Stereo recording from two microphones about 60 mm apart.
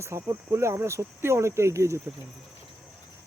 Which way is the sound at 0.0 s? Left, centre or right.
Right.